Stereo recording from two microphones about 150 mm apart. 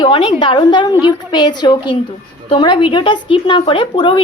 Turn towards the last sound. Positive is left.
turn(degrees=35)  # may be behind; listen again after turning